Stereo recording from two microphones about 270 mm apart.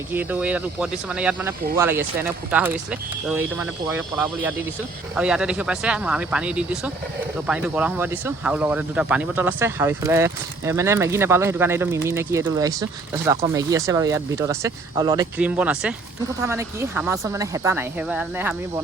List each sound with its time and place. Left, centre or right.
0.1 s speech: centre